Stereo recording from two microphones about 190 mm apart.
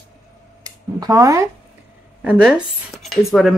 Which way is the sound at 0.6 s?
20° right (ahead or behind).